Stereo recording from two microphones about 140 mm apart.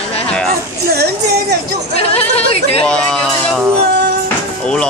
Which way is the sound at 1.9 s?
45° left (ahead or behind).